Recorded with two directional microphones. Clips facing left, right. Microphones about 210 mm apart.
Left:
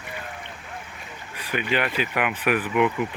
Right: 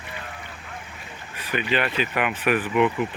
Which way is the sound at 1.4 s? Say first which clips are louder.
Right 1 dB; 10° left (ahead or behind).